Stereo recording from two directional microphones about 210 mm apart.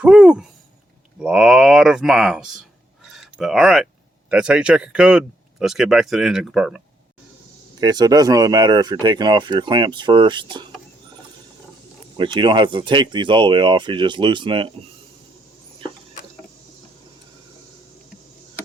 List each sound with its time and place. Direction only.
0.0 s speech: 5° right (ahead or behind)
7.8 s speech: 20° right (ahead or behind)
12.1 s speech: 20° right (ahead or behind)